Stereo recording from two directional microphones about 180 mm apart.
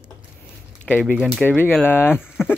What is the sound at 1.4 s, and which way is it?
Speech, 10° left (ahead or behind).